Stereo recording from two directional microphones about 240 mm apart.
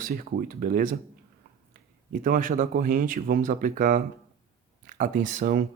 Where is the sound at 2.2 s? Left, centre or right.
Right.